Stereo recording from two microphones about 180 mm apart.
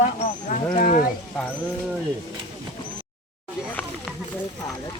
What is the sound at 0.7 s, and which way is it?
Speech, 50° left (ahead or behind).